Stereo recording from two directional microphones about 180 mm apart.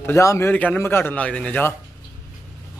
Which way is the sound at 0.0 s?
15° left (ahead or behind).